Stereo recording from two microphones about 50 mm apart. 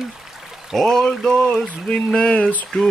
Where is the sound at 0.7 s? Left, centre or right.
Centre; by 2.6 s left.